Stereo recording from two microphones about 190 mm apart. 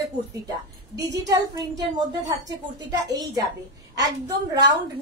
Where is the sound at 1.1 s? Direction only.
20° right (ahead or behind).